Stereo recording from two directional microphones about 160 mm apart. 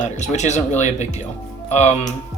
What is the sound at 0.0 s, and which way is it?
Speech, 45° left (ahead or behind).